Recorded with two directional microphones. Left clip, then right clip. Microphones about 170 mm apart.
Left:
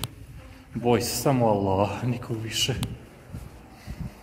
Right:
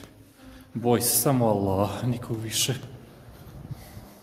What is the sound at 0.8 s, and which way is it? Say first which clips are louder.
A man's voice: left 1 dB; 10° right (ahead or behind).